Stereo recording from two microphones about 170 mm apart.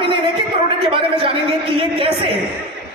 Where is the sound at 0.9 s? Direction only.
30° right (ahead or behind).